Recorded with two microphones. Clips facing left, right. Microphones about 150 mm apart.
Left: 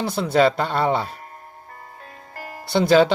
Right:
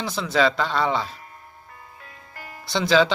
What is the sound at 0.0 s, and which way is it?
Speech, 60° left (ahead or behind).